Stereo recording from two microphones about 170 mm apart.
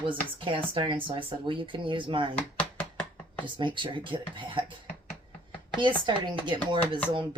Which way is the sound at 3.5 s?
30° right (ahead or behind).